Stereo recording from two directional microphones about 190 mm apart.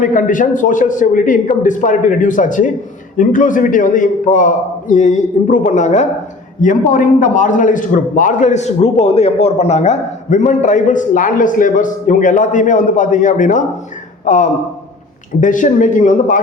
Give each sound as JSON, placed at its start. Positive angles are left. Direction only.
{"t": 0.0, "sound": "a man's voice", "side_deg": 45}